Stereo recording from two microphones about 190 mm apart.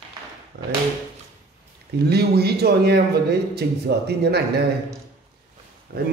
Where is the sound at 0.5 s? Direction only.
60° right (ahead or behind).